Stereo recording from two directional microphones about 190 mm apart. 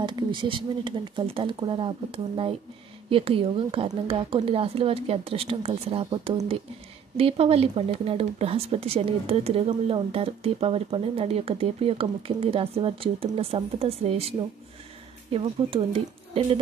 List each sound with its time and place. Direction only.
0.0 s a woman's voice: 25° right (ahead or behind)
15.3 s speech: 30° right (ahead or behind)